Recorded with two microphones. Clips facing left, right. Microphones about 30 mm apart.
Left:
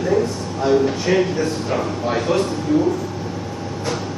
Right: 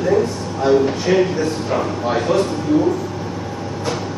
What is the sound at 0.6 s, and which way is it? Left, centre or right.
A man's voice, centre.